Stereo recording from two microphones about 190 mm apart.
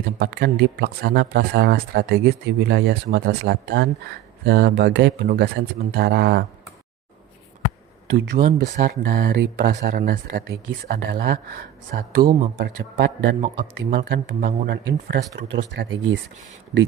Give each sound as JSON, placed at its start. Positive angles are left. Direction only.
{"t": 0.2, "sound": "speech", "side_deg": -60}
{"t": 8.1, "sound": "a man's voice", "side_deg": -60}